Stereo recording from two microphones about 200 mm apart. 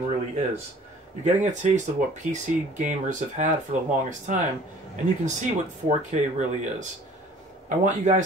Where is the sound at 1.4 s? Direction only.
35° right (ahead or behind).